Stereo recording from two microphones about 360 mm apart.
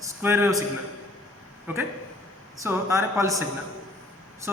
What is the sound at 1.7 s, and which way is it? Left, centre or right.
A man's voice, centre.